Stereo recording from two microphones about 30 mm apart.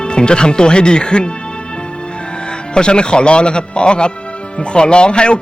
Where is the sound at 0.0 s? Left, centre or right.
Left.